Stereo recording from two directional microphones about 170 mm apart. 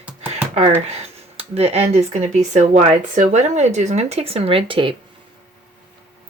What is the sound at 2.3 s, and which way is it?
Speech, 45° right (ahead or behind).